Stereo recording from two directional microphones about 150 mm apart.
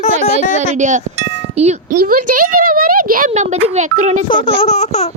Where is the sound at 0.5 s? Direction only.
55° right (ahead or behind).